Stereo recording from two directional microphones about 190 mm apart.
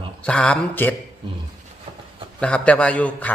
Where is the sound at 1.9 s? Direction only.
30° right (ahead or behind).